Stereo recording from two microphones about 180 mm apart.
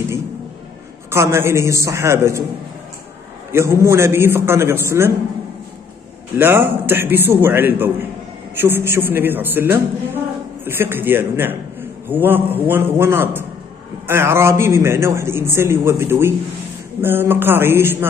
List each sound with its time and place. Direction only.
1.1 s a man's voice: 15° right (ahead or behind)
3.5 s a man's voice: 15° right (ahead or behind)
6.3 s a man's voice: 10° right (ahead or behind)